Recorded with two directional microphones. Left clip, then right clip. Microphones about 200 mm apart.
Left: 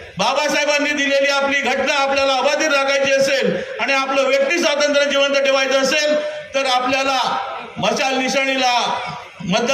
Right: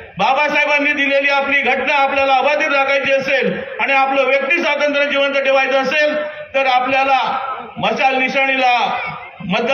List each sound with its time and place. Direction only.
0.2 s a man's voice: 90° left